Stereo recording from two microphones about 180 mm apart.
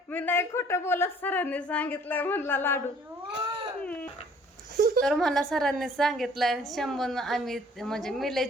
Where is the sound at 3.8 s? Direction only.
10° left (ahead or behind).